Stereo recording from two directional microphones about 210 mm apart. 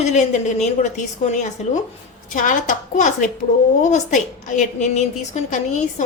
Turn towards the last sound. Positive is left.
turn(degrees=35)  # may be behind; listen again after turning